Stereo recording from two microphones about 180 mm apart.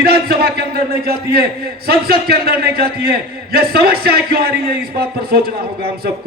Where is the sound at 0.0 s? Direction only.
60° right (ahead or behind).